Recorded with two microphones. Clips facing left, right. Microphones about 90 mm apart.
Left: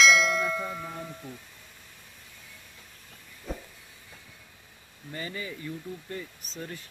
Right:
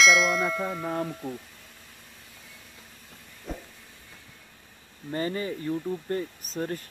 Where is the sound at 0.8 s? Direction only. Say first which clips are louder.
Right 9 dB; 45° right (ahead or behind).